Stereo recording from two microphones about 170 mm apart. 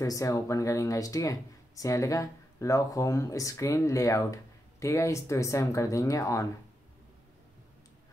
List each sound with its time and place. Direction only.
0.0 s speech: 20° left (ahead or behind)